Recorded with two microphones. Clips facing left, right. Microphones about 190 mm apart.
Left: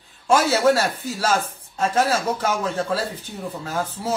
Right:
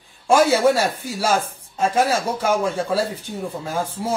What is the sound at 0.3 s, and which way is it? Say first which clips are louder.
Speech: right 2 dB; 10° right (ahead or behind).